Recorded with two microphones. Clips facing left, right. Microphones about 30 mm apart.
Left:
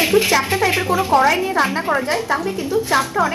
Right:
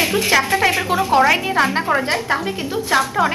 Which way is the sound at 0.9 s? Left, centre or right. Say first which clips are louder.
Even; right.